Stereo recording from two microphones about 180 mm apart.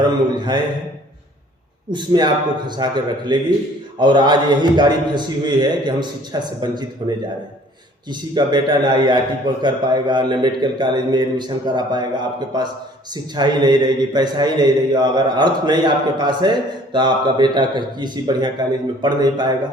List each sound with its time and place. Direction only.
0.3 s a man's voice: 25° right (ahead or behind)
1.9 s a man's voice: 25° right (ahead or behind)